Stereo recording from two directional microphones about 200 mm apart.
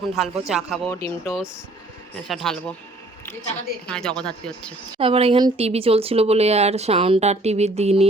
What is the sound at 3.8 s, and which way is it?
Speech, 5° left (ahead or behind).